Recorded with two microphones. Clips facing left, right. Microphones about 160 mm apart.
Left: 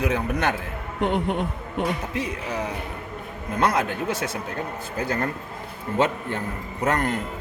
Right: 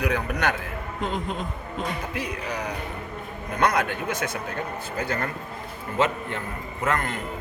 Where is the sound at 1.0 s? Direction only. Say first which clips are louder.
Left 6 dB; 70° left (ahead or behind).